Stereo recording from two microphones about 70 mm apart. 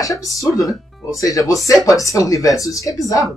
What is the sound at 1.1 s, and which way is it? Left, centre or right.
Speech, left.